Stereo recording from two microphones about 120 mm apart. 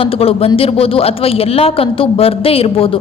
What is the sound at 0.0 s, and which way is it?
A woman's voice, 50° left (ahead or behind).